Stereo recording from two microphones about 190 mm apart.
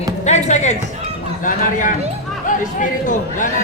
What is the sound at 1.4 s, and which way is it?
Speech, 45° left (ahead or behind).